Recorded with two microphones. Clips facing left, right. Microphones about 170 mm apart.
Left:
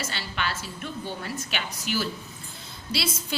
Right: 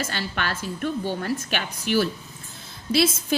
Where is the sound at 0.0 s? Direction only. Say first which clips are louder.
Right 3 dB; 50° right (ahead or behind).